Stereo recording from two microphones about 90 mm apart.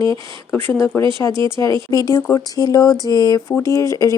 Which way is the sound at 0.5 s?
25° left (ahead or behind).